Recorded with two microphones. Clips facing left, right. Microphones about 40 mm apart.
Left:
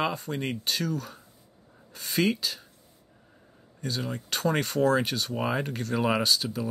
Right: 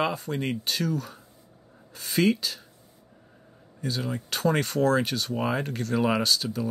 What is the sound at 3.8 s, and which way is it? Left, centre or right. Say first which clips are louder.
Speech: right 2 dB; centre.